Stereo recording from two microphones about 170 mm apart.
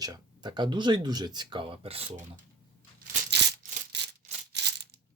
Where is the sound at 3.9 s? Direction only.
90° right.